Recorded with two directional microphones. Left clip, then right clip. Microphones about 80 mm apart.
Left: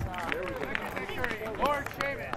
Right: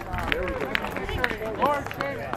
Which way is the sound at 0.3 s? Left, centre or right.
Right.